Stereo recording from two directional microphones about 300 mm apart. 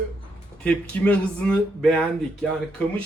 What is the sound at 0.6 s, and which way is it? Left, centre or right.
Speech, centre.